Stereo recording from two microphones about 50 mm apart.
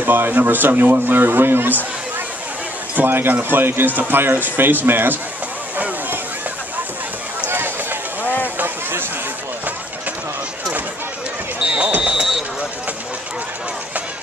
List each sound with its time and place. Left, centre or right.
0.0 s speech: right
3.1 s speech: right
7.4 s run: right
8.2 s a sound: left
11.6 s basketball bounce: right
12.0 s vehicle: centre